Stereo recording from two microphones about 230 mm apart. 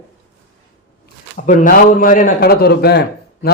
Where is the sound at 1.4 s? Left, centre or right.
Left.